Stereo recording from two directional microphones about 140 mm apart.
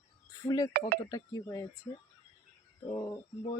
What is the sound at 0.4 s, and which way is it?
Speech, 25° left (ahead or behind).